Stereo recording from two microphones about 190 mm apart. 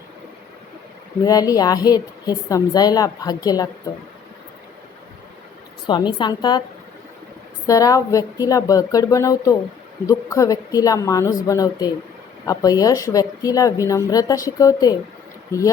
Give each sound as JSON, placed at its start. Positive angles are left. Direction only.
{"t": 1.2, "sound": "a woman's voice", "side_deg": 20}
{"t": 5.9, "sound": "a woman's voice", "side_deg": 25}
{"t": 7.7, "sound": "a woman's voice", "side_deg": 20}